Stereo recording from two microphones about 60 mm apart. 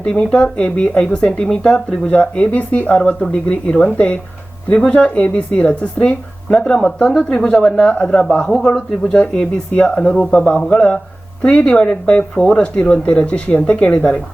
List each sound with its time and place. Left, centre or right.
0.0 s speech: centre
3.0 s speech: centre